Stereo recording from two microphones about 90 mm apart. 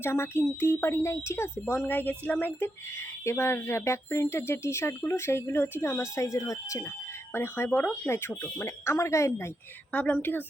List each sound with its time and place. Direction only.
0.0 s a woman's voice: 25° left (ahead or behind)
1.9 s a woman's voice: 20° left (ahead or behind); by 6.9 s 35° left (ahead or behind)
7.3 s a woman's voice: 25° left (ahead or behind)
9.9 s a woman's voice: 15° left (ahead or behind)